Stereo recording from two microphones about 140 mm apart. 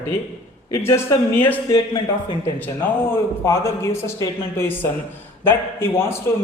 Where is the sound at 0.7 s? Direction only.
20° left (ahead or behind).